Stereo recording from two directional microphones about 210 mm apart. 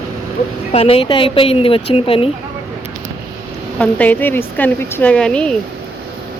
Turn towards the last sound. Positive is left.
turn(degrees=5)  # may be behind; listen again after turning